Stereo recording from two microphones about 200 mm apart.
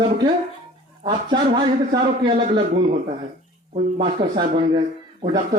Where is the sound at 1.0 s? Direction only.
20° right (ahead or behind).